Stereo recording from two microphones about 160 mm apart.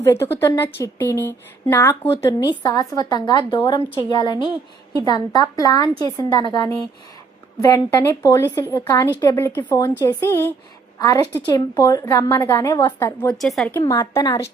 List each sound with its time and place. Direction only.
0.0 s a woman's voice: 15° left (ahead or behind)
13.3 s speech: centre (ahead or behind)
13.7 s a woman's voice: 20° left (ahead or behind)